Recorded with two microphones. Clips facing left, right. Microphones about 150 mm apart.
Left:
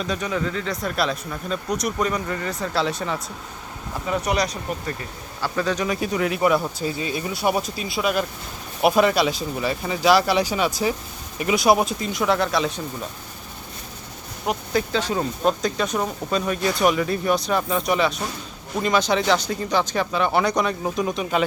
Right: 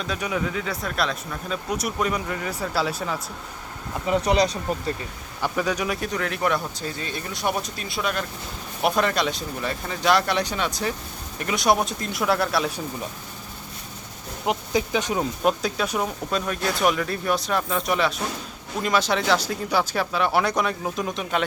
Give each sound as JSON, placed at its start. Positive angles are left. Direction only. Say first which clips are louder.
{"t": 0.2, "sound": "speech", "louder": "left 1 dB", "side_deg": -5}
{"t": 4.2, "sound": "speech", "louder": "right 3 dB", "side_deg": -30}
{"t": 5.4, "sound": "speech", "louder": "left 1 dB", "side_deg": -10}
{"t": 6.0, "sound": "speech", "louder": "left 4 dB", "side_deg": 5}
{"t": 14.4, "sound": "speech", "louder": "even", "side_deg": -15}